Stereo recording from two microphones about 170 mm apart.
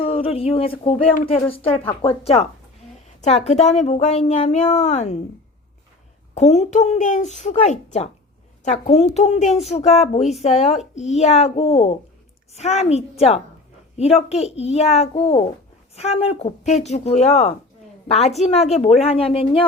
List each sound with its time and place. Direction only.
0.0 s a woman's voice: 35° left (ahead or behind)
6.3 s a child's voice: 40° left (ahead or behind)